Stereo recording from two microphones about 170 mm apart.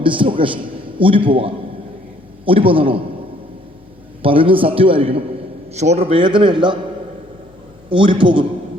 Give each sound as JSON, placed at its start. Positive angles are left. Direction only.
{"t": 0.0, "sound": "a man's voice", "side_deg": -30}
{"t": 4.2, "sound": "a man's voice", "side_deg": -30}
{"t": 7.9, "sound": "a man's voice", "side_deg": -30}